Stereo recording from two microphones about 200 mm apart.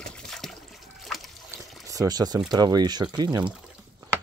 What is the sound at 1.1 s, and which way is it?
Splash, centre (ahead or behind).